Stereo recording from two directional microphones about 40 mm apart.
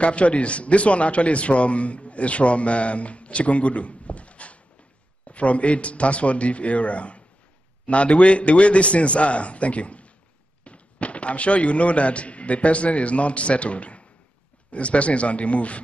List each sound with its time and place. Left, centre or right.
0.0 s a man's voice: left